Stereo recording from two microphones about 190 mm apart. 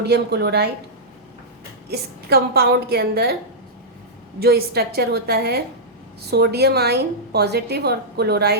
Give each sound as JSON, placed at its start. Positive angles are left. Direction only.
{"t": 0.0, "sound": "a woman's voice", "side_deg": -60}
{"t": 1.9, "sound": "a woman's voice", "side_deg": -55}
{"t": 4.4, "sound": "a woman's voice", "side_deg": -55}